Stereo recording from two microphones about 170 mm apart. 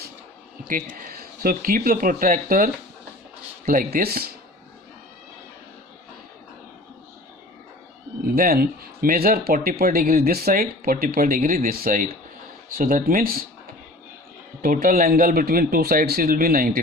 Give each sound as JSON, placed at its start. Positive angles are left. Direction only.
{"t": 0.7, "sound": "speech", "side_deg": -55}
{"t": 3.7, "sound": "speech", "side_deg": -60}
{"t": 8.4, "sound": "speech", "side_deg": -60}
{"t": 14.6, "sound": "speech", "side_deg": -55}